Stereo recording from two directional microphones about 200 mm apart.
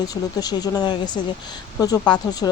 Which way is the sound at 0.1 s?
20° left (ahead or behind).